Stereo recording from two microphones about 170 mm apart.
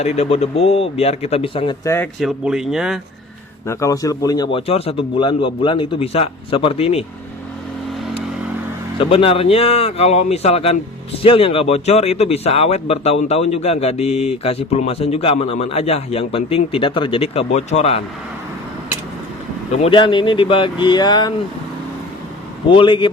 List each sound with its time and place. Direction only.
0.0 s speech: 40° left (ahead or behind)
1.8 s speech: 15° left (ahead or behind)
2.1 s speech: centre (ahead or behind)
3.7 s a man's voice: 20° left (ahead or behind); by 7.0 s 35° left (ahead or behind)
9.0 s speech: 35° left (ahead or behind)
19.7 s a man's voice: 35° left (ahead or behind)
22.7 s a man's voice: 30° left (ahead or behind)